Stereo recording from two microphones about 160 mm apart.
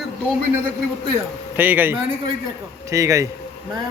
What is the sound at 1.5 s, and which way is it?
A man's voice, 10° right (ahead or behind).